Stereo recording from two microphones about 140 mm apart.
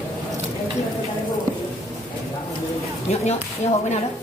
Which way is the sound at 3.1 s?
55° left (ahead or behind).